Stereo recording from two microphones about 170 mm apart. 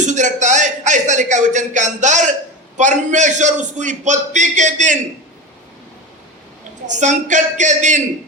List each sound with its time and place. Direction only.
0.1 s a man's voice: 45° right (ahead or behind)
6.8 s a man's voice: 45° right (ahead or behind)